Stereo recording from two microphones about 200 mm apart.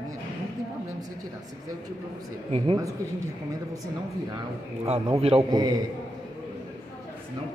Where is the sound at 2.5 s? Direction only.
30° right (ahead or behind).